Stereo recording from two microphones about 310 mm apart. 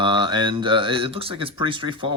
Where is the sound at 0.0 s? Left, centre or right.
Centre.